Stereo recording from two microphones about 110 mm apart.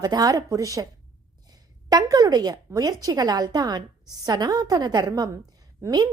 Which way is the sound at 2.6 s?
35° right (ahead or behind).